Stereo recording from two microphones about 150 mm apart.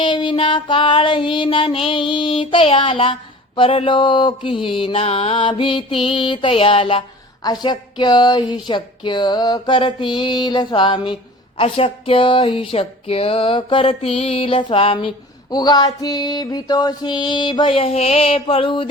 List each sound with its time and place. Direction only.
0.0 s speech: 35° left (ahead or behind)